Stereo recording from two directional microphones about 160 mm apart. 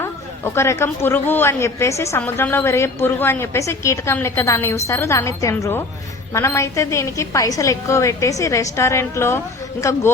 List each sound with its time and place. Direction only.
0.0 s a woman's voice: 15° left (ahead or behind)